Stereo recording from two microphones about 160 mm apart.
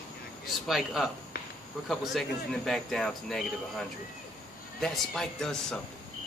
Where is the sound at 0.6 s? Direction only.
Centre (ahead or behind).